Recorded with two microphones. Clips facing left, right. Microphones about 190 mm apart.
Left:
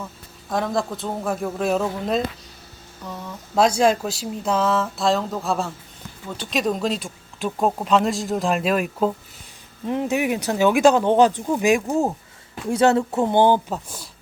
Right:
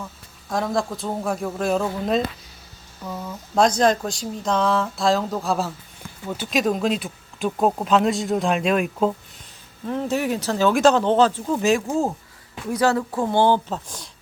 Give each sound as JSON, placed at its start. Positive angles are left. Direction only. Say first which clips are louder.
{"t": 0.5, "sound": "speech", "louder": "even", "side_deg": 0}
{"t": 9.8, "sound": "speech", "louder": "left 1 dB", "side_deg": 15}